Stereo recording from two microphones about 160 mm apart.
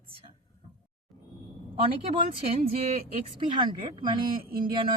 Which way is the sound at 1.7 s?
35° right (ahead or behind).